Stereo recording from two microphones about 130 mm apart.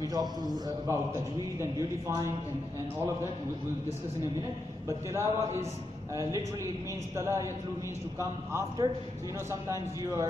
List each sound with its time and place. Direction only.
0.1 s a man's voice: 30° right (ahead or behind)
4.8 s a man's voice: 20° right (ahead or behind)
7.2 s a man's voice: 25° right (ahead or behind)